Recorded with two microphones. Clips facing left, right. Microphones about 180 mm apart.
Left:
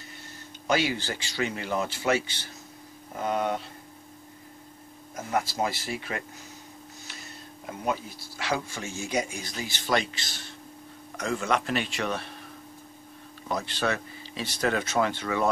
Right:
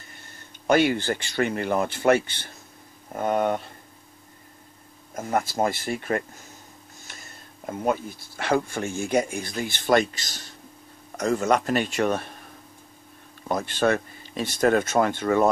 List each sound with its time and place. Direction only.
0.7 s speech: 55° right (ahead or behind)
5.1 s speech: 50° right (ahead or behind)
13.5 s speech: 50° right (ahead or behind)